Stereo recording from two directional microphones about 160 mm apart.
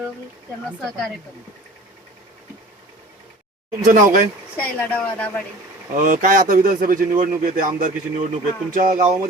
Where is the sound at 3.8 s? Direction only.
50° right (ahead or behind).